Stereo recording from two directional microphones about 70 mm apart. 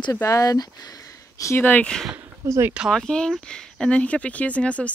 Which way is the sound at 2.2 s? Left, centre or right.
Right.